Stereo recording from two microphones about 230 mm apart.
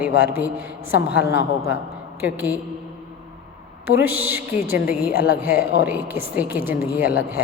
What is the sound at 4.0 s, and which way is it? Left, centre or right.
A woman's voice, centre.